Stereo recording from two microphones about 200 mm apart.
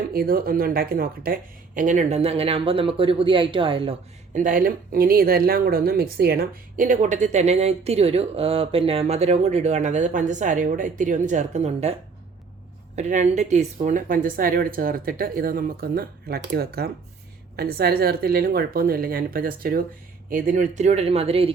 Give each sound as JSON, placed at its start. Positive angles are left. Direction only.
{"t": 0.1, "sound": "speech", "side_deg": -50}
{"t": 4.4, "sound": "speech", "side_deg": -40}
{"t": 13.0, "sound": "speech", "side_deg": -35}